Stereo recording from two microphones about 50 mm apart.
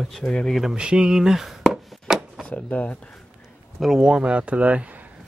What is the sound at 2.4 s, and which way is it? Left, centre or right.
Speech, left.